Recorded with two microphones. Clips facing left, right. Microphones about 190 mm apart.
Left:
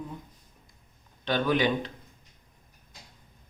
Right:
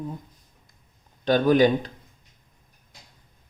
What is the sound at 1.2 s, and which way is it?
Speech, 40° right (ahead or behind).